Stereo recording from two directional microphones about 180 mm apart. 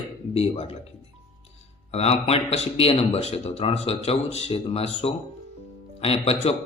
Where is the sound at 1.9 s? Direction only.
35° left (ahead or behind).